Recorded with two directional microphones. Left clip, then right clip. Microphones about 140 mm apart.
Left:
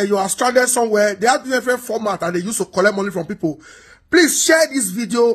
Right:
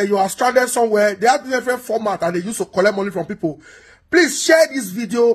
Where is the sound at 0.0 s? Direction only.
25° left (ahead or behind).